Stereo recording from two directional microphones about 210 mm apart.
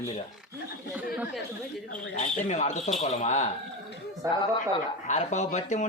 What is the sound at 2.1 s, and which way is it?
Speech, 35° left (ahead or behind).